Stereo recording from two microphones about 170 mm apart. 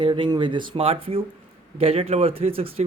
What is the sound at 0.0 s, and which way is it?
Speech, 30° right (ahead or behind).